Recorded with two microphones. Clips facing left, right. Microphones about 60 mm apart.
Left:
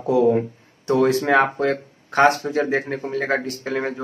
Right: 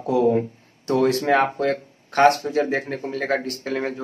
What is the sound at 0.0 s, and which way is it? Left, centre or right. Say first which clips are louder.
A man's voice: left 2 dB; left.